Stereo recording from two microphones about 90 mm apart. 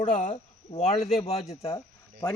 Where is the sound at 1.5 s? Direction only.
90° left.